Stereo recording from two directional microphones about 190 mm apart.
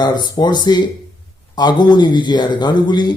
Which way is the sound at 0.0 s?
20° left (ahead or behind).